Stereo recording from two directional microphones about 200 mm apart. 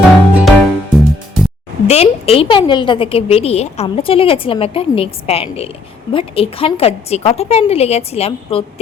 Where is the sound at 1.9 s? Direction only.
30° left (ahead or behind).